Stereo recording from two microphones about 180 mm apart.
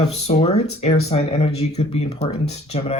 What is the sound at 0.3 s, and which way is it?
Speech, 35° left (ahead or behind).